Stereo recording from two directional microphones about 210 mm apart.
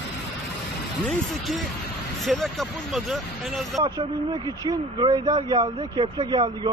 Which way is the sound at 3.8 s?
20° right (ahead or behind).